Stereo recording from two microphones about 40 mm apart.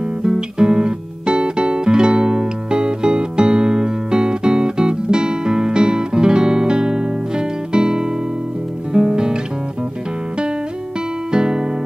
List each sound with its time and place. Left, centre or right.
0.2 s music: centre
11.3 s music: centre